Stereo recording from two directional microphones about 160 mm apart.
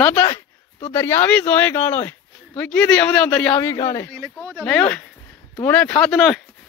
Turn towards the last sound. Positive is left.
turn(degrees=5)  # may be behind; listen again after turning